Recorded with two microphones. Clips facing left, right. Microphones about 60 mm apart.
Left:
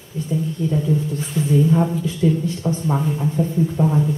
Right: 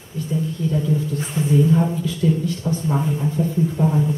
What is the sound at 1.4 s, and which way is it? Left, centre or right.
Speech, right.